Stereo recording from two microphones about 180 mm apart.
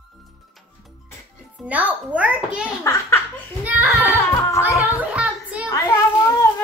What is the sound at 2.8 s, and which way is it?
Laughter, 15° left (ahead or behind).